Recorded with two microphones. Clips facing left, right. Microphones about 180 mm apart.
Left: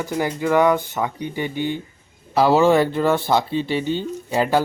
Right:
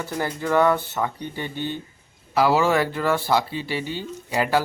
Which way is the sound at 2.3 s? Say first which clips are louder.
Left 4 dB; 25° left (ahead or behind).